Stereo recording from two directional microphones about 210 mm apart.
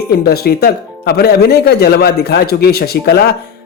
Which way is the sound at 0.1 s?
50° left (ahead or behind).